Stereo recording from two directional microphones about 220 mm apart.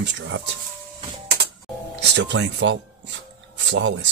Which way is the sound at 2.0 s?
55° right (ahead or behind).